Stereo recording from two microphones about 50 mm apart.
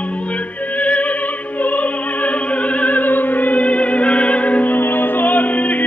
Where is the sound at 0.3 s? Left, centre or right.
Left.